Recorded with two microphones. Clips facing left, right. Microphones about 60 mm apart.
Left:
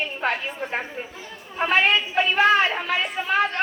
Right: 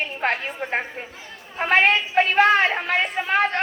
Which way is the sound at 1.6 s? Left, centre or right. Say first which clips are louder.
Right 2 dB; right.